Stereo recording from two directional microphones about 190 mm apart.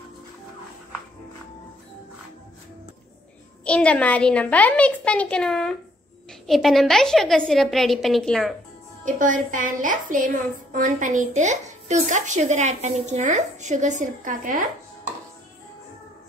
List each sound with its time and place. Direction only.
3.6 s a woman's voice: 5° left (ahead or behind)
9.0 s a woman's voice: 45° right (ahead or behind)